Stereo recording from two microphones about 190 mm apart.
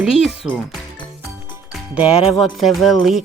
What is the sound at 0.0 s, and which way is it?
Speech, 5° right (ahead or behind).